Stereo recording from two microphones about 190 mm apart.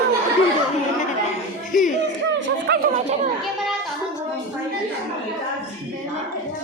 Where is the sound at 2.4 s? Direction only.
65° right (ahead or behind).